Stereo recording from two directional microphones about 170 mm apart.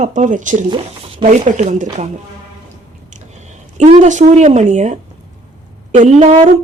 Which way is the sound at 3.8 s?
40° right (ahead or behind).